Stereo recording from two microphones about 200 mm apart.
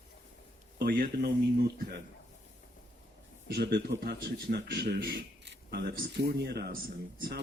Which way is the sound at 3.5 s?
55° right (ahead or behind).